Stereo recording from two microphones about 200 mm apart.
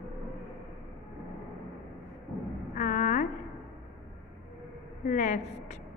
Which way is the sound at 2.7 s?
40° left (ahead or behind).